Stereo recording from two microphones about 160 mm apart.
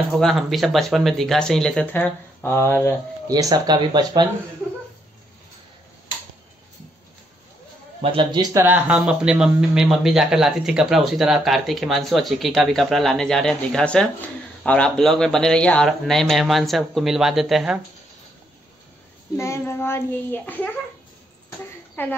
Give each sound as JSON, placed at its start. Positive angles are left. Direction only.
{"t": 0.2, "sound": "a man's voice", "side_deg": 0}
{"t": 3.3, "sound": "speech", "side_deg": -25}
{"t": 8.0, "sound": "speech", "side_deg": -35}
{"t": 8.6, "sound": "a man's voice", "side_deg": -10}
{"t": 19.3, "sound": "a child's voice", "side_deg": 15}
{"t": 22.0, "sound": "a child's voice", "side_deg": 10}